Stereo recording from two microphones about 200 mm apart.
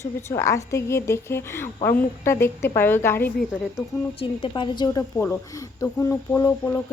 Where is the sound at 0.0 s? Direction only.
15° left (ahead or behind).